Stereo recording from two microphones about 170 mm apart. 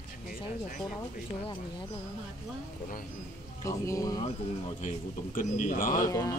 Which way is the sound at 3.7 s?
20° left (ahead or behind).